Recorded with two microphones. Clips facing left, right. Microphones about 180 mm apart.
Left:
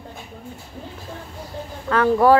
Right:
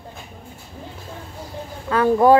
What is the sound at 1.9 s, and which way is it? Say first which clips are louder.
Speech: right 1 dB; 15° right (ahead or behind).